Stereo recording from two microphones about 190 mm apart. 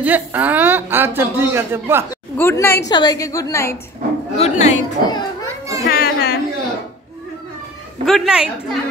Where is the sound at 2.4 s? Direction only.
10° left (ahead or behind).